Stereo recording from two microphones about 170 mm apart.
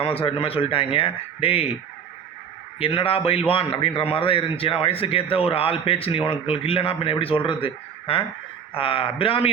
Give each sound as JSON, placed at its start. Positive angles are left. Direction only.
{"t": 0.0, "sound": "a man's voice", "side_deg": 35}
{"t": 2.7, "sound": "a man's voice", "side_deg": 35}